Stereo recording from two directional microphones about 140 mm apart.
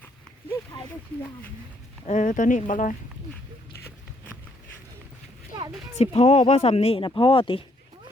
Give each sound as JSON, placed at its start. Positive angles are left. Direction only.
{"t": 2.0, "sound": "speech", "side_deg": 60}
{"t": 6.0, "sound": "speech", "side_deg": 50}